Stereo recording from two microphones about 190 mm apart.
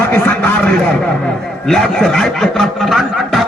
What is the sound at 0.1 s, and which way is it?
Speech, 10° left (ahead or behind).